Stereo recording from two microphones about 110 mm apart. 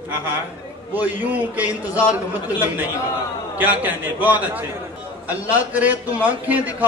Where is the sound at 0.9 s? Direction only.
15° right (ahead or behind).